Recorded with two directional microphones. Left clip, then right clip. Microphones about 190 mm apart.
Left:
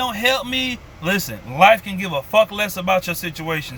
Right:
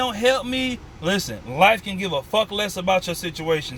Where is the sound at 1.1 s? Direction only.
10° left (ahead or behind).